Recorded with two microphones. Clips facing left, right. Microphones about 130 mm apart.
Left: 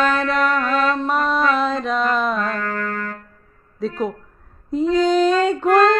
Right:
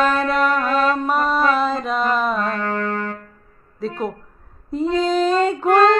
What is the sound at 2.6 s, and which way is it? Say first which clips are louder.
Music: right 2 dB; 30° right (ahead or behind).